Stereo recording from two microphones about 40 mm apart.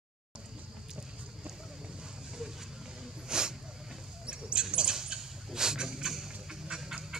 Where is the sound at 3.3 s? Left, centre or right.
Centre.